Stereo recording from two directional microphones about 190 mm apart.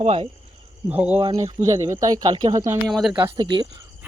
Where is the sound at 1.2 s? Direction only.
20° right (ahead or behind).